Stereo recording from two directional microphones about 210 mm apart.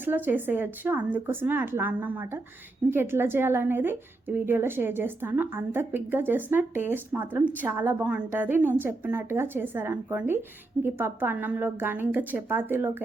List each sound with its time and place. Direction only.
0.0 s a woman's voice: 10° right (ahead or behind)